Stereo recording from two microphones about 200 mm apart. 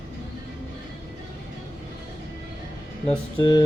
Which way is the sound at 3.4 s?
20° left (ahead or behind).